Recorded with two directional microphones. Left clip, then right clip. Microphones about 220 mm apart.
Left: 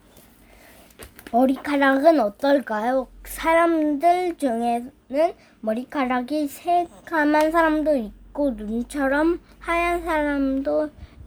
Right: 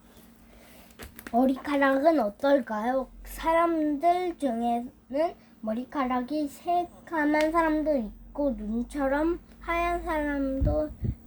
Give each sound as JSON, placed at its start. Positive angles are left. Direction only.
{"t": 1.3, "sound": "speech", "side_deg": 25}